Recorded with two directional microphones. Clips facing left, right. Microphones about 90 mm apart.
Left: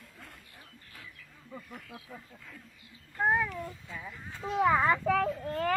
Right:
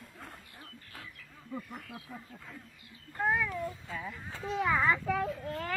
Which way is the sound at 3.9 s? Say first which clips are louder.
Right 3 dB; centre (ahead or behind).